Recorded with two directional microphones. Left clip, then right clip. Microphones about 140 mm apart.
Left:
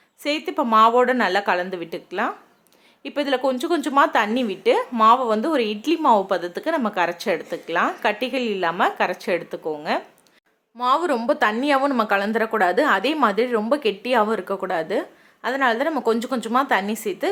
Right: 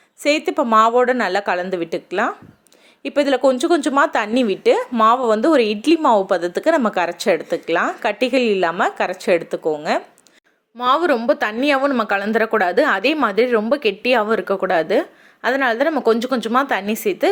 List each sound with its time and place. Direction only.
0.2 s a woman's voice: 30° right (ahead or behind)
10.8 s a woman's voice: 25° right (ahead or behind)